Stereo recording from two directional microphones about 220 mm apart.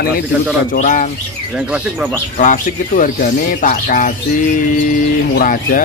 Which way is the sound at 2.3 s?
35° left (ahead or behind).